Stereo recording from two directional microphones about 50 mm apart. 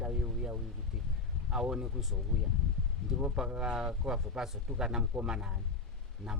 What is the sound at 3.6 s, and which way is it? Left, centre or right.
Speech, centre.